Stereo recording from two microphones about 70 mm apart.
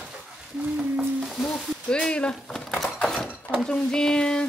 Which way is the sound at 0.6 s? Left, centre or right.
Centre.